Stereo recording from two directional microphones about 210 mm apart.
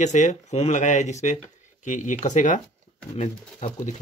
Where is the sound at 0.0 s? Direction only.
35° left (ahead or behind).